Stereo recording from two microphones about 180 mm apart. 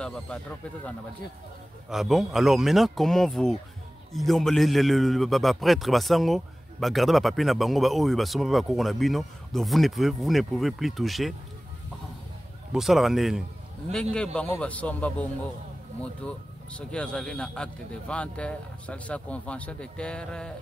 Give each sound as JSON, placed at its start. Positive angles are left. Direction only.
{"t": 0.0, "sound": "a man's voice", "side_deg": 5}
{"t": 12.7, "sound": "a man's voice", "side_deg": 0}